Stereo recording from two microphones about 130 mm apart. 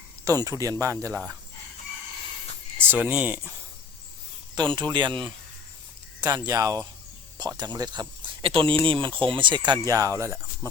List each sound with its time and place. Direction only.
0.3 s speech: 25° right (ahead or behind)
2.9 s speech: 10° right (ahead or behind)
4.5 s speech: 35° right (ahead or behind)